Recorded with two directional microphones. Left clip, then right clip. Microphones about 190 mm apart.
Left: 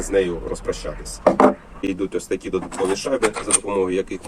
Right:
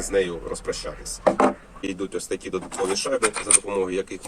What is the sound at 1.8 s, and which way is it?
Speech, centre (ahead or behind).